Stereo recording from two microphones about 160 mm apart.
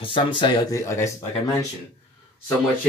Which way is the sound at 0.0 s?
30° left (ahead or behind).